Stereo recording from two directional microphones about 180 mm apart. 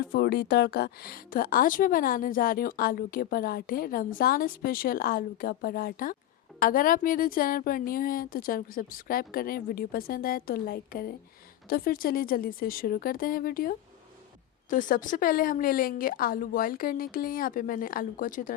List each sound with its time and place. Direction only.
0.1 s speech: 65° left (ahead or behind); by 18.5 s 50° left (ahead or behind)